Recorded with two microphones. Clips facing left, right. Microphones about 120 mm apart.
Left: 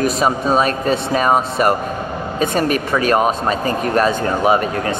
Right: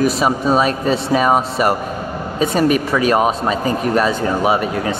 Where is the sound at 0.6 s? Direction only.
50° left (ahead or behind).